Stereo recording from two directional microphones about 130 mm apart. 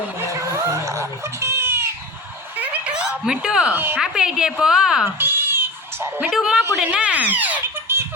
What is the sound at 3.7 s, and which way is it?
Speech, 15° right (ahead or behind).